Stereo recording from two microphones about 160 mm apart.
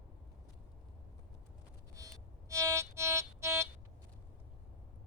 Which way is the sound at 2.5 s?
20° right (ahead or behind).